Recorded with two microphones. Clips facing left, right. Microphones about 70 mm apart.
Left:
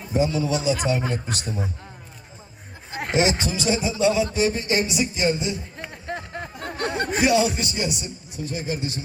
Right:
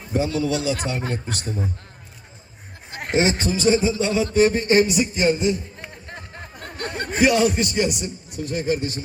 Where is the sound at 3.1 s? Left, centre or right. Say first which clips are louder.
Right 2 dB; right.